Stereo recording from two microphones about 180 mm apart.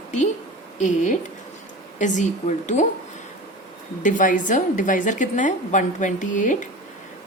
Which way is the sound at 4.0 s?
45° left (ahead or behind).